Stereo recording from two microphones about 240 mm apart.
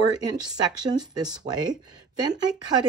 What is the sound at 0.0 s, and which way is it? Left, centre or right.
Speech, centre.